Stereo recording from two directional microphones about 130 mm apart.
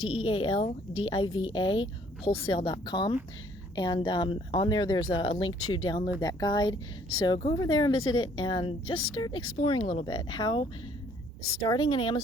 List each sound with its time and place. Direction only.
0.0 s speech: 40° left (ahead or behind)
7.3 s speech: 50° left (ahead or behind)
7.6 s speech: 35° left (ahead or behind)
9.6 s speech: 45° left (ahead or behind)